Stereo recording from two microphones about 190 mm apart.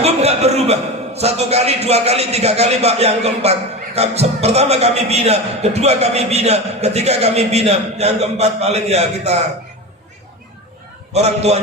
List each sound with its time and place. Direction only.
0.0 s a man's voice: 35° right (ahead or behind)
11.1 s a man's voice: 35° right (ahead or behind)